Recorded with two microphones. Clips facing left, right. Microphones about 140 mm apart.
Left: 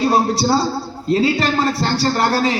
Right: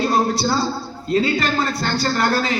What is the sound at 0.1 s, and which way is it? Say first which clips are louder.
A man's voice: left 3 dB; 30° left (ahead or behind).